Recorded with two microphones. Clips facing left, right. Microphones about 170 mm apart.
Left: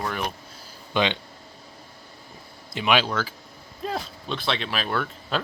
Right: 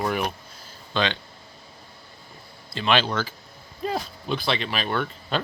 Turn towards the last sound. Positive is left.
turn(degrees=0)  # may be behind; listen again after turning